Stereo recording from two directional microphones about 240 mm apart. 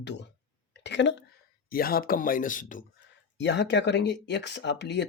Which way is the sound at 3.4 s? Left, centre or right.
Left.